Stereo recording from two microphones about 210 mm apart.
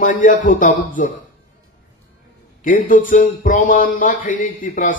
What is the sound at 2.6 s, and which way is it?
Speech, 40° left (ahead or behind).